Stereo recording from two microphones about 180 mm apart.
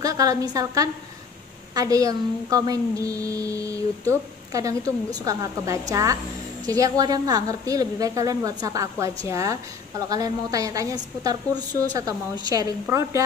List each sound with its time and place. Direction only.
0.0 s a woman's voice: 20° right (ahead or behind)